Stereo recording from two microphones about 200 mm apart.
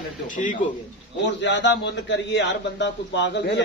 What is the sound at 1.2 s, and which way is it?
A man's voice, 60° left (ahead or behind).